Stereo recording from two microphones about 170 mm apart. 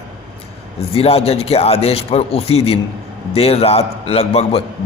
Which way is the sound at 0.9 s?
35° left (ahead or behind).